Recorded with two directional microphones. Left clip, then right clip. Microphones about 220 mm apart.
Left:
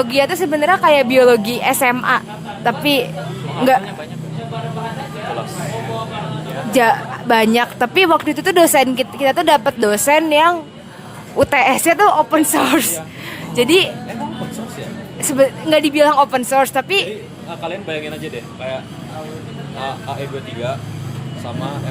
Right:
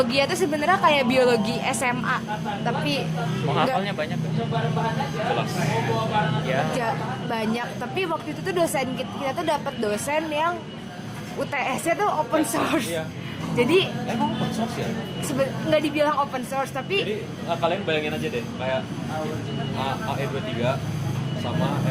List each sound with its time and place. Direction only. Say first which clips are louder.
0.0 s a woman's voice: left 6 dB; 30° left (ahead or behind)
6.7 s a woman's voice: left 12 dB; 45° left (ahead or behind)
15.4 s a woman's voice: left 9 dB; 50° left (ahead or behind)
17.8 s speech: even; 25° left (ahead or behind)